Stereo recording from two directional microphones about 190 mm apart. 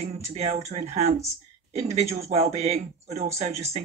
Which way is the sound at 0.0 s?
35° right (ahead or behind).